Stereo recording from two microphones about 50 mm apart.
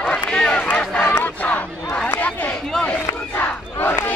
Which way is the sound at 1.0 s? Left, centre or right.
Left.